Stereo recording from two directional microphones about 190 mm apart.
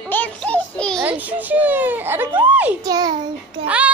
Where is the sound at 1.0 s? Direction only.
10° right (ahead or behind).